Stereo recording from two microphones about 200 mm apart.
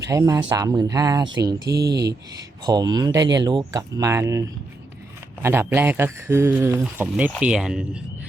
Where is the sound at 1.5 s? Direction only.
55° right (ahead or behind).